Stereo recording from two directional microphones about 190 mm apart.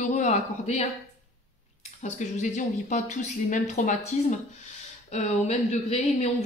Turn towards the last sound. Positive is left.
turn(degrees=35)  # may be behind; listen again after turning